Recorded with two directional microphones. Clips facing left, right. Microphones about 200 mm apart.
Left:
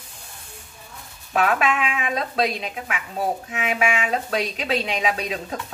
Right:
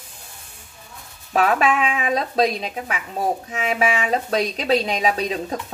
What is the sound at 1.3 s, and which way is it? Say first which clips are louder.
Speech: right 2 dB; 35° right (ahead or behind).